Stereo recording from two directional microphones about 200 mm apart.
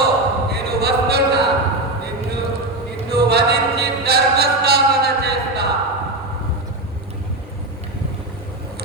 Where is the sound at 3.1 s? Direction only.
55° right (ahead or behind).